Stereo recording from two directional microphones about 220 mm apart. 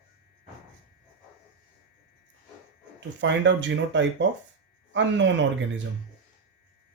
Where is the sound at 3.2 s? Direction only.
55° right (ahead or behind).